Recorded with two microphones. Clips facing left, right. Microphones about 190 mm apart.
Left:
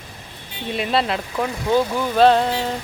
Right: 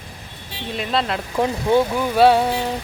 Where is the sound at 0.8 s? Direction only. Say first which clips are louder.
Left 1 dB; 5° left (ahead or behind).